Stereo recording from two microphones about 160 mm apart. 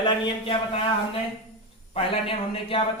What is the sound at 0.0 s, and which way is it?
Speech, 35° left (ahead or behind).